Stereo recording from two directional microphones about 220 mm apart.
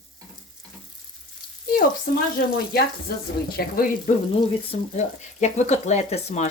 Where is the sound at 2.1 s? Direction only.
40° left (ahead or behind).